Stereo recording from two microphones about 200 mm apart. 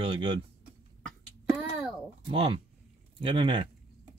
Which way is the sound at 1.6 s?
Centre (ahead or behind).